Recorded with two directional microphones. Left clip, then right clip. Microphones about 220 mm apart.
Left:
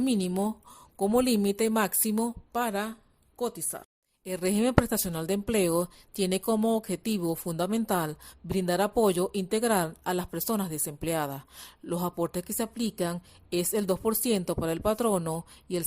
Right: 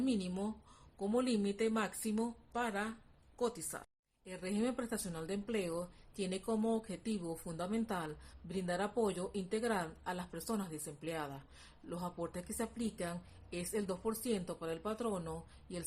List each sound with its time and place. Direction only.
0.0 s speech: 45° left (ahead or behind); by 3.8 s 30° left (ahead or behind)
4.2 s a woman's voice: 45° left (ahead or behind)